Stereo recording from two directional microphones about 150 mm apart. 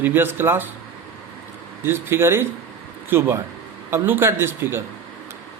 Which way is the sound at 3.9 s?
15° right (ahead or behind).